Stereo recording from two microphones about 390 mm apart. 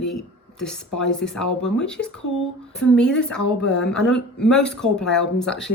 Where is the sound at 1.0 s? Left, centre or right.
Centre.